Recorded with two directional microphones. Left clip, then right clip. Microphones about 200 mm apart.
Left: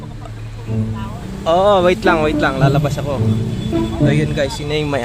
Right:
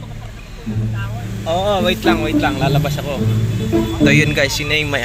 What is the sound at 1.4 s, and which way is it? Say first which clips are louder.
A man's voice: left 5 dB; 50° left (ahead or behind).